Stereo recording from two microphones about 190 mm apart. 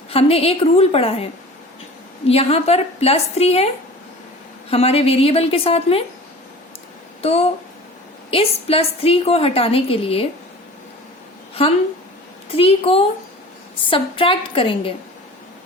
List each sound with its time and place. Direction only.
0.1 s a woman's voice: 30° left (ahead or behind)
4.7 s a woman's voice: 30° left (ahead or behind)
7.2 s a woman's voice: 30° left (ahead or behind)
11.6 s a woman's voice: 30° left (ahead or behind)